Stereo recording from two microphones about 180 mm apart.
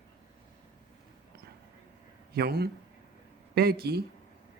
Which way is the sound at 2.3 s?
60° right (ahead or behind).